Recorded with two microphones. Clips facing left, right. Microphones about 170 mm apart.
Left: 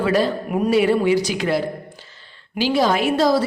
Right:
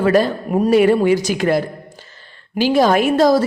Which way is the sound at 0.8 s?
50° right (ahead or behind).